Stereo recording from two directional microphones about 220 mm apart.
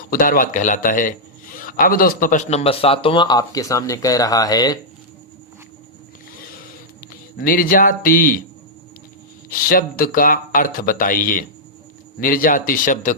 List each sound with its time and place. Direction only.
0.1 s a man's voice: 40° left (ahead or behind); by 4.8 s 15° left (ahead or behind)
7.1 s speech: 40° left (ahead or behind)
9.5 s speech: 40° left (ahead or behind)